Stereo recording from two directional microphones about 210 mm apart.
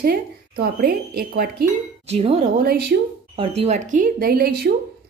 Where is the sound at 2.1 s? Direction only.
30° right (ahead or behind).